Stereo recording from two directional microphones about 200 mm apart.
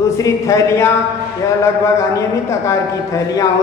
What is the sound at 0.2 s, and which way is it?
Speech, 15° left (ahead or behind).